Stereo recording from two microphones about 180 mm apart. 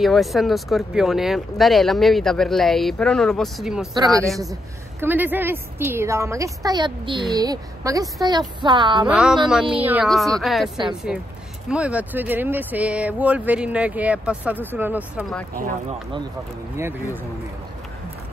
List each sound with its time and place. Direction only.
0.0 s speech: centre (ahead or behind)
3.9 s speech: 20° right (ahead or behind)
5.0 s speech: 10° right (ahead or behind); by 9.1 s 25° right (ahead or behind)
9.1 s speech: 5° right (ahead or behind)
16.7 s speech: 15° right (ahead or behind)